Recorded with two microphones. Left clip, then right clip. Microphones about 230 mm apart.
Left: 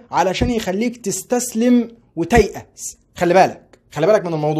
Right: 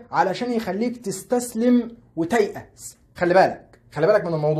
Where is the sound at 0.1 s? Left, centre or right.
Left.